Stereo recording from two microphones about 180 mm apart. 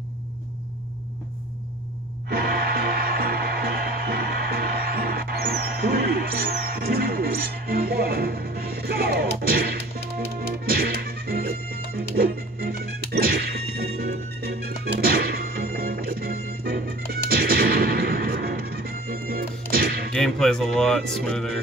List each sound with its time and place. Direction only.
2.2 s music: 60° right (ahead or behind)
20.1 s speech: 5° left (ahead or behind)